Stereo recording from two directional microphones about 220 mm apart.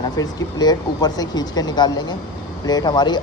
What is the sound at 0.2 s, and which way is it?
Speech, 15° left (ahead or behind).